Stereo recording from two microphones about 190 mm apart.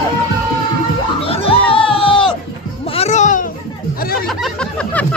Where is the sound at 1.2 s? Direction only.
30° left (ahead or behind).